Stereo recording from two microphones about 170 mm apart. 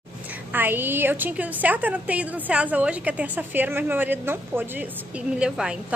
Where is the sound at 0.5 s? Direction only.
10° right (ahead or behind).